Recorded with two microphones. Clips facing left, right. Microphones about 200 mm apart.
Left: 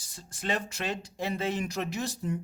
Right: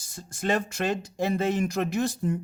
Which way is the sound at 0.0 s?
50° right (ahead or behind).